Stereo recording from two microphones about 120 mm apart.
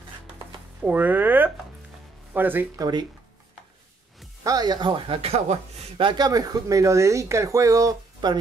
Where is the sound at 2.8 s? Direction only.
35° right (ahead or behind).